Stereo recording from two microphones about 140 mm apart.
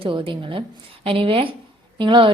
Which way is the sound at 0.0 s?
35° right (ahead or behind).